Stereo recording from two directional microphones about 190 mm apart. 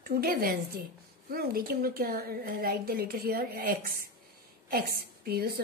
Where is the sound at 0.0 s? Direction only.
50° right (ahead or behind).